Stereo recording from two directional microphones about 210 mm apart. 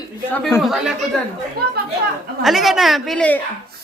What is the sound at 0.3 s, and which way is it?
Speech, 5° left (ahead or behind).